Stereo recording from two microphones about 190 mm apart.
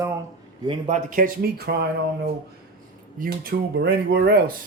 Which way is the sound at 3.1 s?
50° right (ahead or behind).